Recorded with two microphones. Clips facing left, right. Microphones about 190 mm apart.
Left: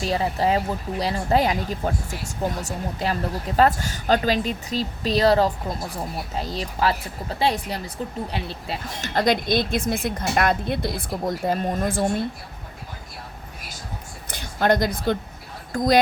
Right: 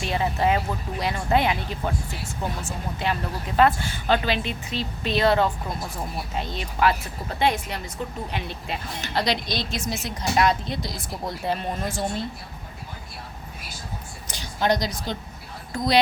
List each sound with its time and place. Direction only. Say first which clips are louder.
0.0 s a woman's voice: left 1 dB; 35° left (ahead or behind)
9.1 s a woman's voice: left 5 dB; 50° left (ahead or behind)
14.3 s a sound: left 3 dB; 55° left (ahead or behind)
15.7 s speech: left 4 dB; 45° left (ahead or behind)